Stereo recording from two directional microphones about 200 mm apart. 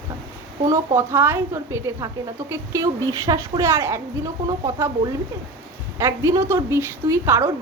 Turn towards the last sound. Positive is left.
turn(degrees=-15)  # may be behind; listen again after turning